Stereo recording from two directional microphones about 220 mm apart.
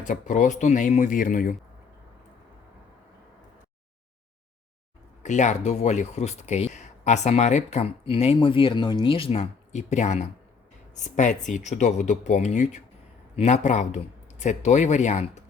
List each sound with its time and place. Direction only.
0.0 s speech: 35° left (ahead or behind)
5.2 s speech: 35° left (ahead or behind)